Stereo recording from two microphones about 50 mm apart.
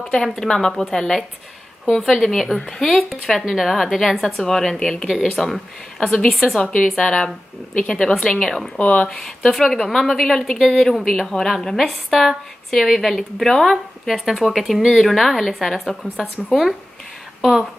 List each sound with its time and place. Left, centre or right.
0.0 s a woman's voice: centre
8.7 s speech: left
9.0 s a woman's voice: centre